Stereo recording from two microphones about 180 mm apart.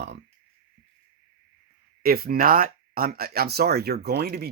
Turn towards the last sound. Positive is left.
turn(degrees=-60)  # may be behind; listen again after turning